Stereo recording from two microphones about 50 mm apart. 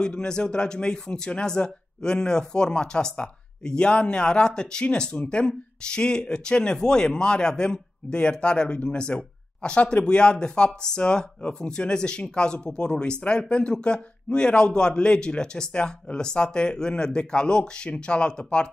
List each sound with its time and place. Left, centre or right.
0.0 s speech: centre